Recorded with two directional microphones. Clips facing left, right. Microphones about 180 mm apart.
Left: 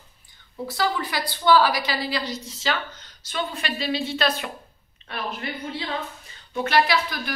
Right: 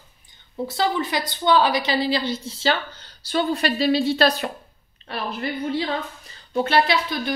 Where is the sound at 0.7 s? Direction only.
25° right (ahead or behind).